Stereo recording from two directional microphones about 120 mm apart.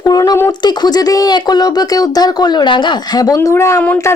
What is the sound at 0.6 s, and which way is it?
A woman's voice, 35° left (ahead or behind).